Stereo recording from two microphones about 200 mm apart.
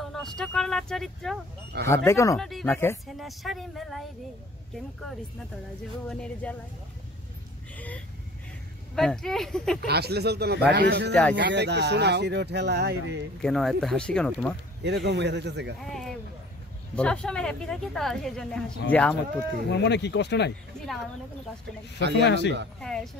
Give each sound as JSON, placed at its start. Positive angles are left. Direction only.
{"t": 0.0, "sound": "speech", "side_deg": 0}
{"t": 1.7, "sound": "speech", "side_deg": -55}
{"t": 2.0, "sound": "speech", "side_deg": 15}
{"t": 2.3, "sound": "speech", "side_deg": 0}
{"t": 3.2, "sound": "speech", "side_deg": 0}
{"t": 6.0, "sound": "speech", "side_deg": 5}
{"t": 7.7, "sound": "speech", "side_deg": 10}
{"t": 9.8, "sound": "speech", "side_deg": -55}
{"t": 13.4, "sound": "speech", "side_deg": 0}
{"t": 14.8, "sound": "speech", "side_deg": -55}
{"t": 15.8, "sound": "speech", "side_deg": 0}
{"t": 19.7, "sound": "speech", "side_deg": 60}
{"t": 22.2, "sound": "speech", "side_deg": 60}
{"t": 22.8, "sound": "speech", "side_deg": 5}